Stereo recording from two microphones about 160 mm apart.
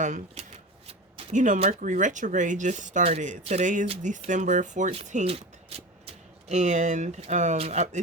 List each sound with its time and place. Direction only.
0.0 s speech: 50° right (ahead or behind)
0.9 s a sound: 45° right (ahead or behind)
1.8 s speech: 50° right (ahead or behind)